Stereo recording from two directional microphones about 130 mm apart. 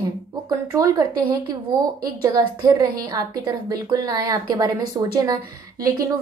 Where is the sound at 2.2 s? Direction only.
30° right (ahead or behind).